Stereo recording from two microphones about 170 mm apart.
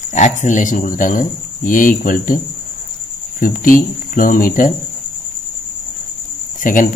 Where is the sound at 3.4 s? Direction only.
55° left (ahead or behind).